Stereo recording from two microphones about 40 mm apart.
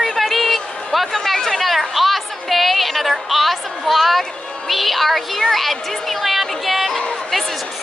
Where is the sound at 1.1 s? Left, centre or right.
Centre.